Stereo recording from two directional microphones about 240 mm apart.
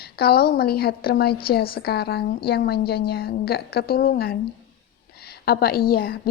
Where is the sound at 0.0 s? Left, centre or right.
Left.